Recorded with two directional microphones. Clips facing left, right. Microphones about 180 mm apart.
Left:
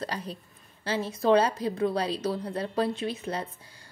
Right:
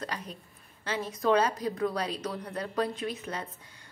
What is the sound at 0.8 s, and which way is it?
A woman's voice, 30° left (ahead or behind).